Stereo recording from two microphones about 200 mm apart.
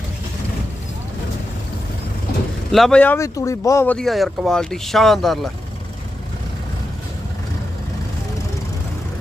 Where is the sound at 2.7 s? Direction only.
Centre (ahead or behind).